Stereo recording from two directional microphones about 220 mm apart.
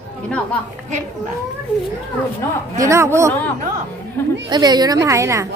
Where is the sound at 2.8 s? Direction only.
15° right (ahead or behind).